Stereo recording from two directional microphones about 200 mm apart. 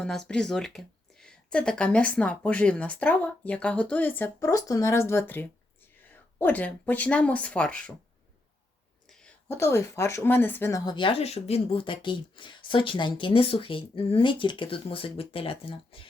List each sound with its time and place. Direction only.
0.0 s speech: 5° left (ahead or behind)
9.0 s speech: 5° left (ahead or behind); by 16.0 s 30° left (ahead or behind)